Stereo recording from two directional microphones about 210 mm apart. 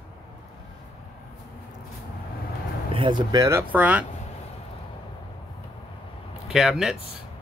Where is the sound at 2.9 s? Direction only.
25° right (ahead or behind); by 4.0 s 5° right (ahead or behind).